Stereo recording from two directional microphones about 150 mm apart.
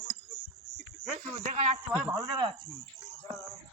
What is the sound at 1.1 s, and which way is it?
Speech, 50° right (ahead or behind).